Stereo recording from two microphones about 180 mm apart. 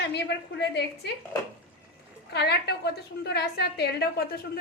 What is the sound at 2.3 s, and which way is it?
A woman's voice, 65° left (ahead or behind).